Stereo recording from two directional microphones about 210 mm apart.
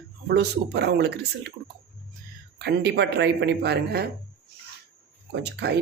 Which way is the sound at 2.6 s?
50° right (ahead or behind).